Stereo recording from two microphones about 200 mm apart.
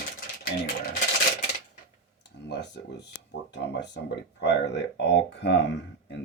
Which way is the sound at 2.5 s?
60° left (ahead or behind).